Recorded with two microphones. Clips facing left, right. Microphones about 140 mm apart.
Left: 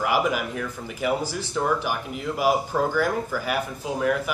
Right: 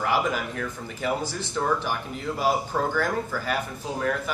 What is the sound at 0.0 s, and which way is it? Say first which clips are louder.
Speech: left 2 dB; 10° left (ahead or behind).